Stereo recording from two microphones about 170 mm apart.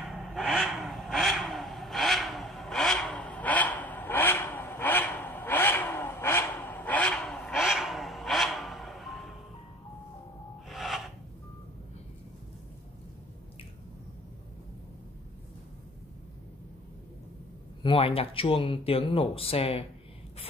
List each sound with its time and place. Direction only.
0.1 s vehicle: centre (ahead or behind)
10.7 s a sound: centre (ahead or behind)
17.8 s speech: 35° left (ahead or behind)